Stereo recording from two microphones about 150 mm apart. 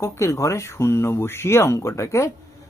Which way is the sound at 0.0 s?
20° left (ahead or behind).